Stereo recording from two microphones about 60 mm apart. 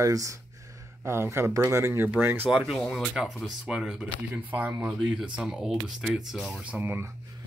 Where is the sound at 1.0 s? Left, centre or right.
Right.